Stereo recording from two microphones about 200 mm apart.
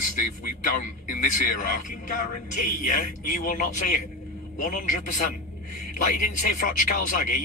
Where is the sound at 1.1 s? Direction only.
40° left (ahead or behind).